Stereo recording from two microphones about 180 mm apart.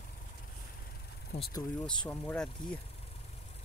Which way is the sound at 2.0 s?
5° left (ahead or behind).